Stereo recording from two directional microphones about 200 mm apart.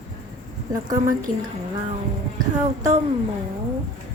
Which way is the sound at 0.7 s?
20° right (ahead or behind).